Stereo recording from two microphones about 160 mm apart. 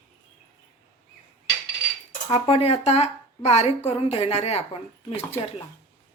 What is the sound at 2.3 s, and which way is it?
Speech, 40° left (ahead or behind).